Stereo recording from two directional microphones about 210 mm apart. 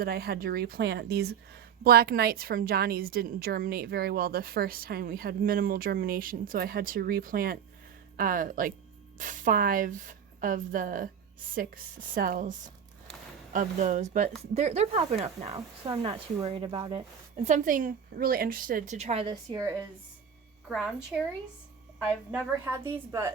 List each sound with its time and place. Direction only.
0.0 s a woman's voice: 45° right (ahead or behind)
12.1 s speech: 40° right (ahead or behind)
15.5 s speech: 20° right (ahead or behind)
20.7 s a woman's voice: centre (ahead or behind)